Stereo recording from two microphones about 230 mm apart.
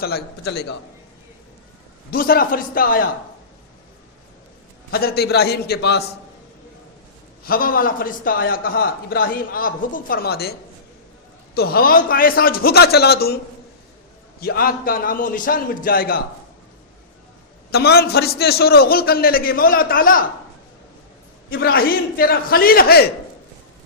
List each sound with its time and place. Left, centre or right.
0.0 s a man's voice: left
2.0 s a man's voice: left
4.9 s a man's voice: left
7.4 s a man's voice: left
17.7 s a man's voice: left
21.5 s a man's voice: left